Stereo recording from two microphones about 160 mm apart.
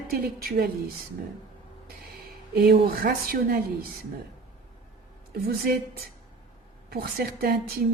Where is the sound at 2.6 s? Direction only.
70° right (ahead or behind).